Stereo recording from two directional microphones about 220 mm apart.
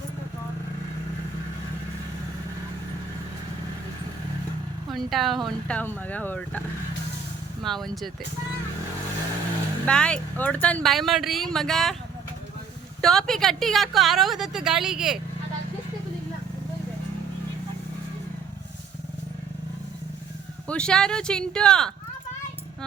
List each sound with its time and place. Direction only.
4.9 s a woman's voice: centre (ahead or behind)
7.6 s a woman's voice: centre (ahead or behind)
9.8 s a woman's voice: 5° left (ahead or behind)
13.0 s a woman's voice: centre (ahead or behind)
20.7 s a woman's voice: 5° left (ahead or behind)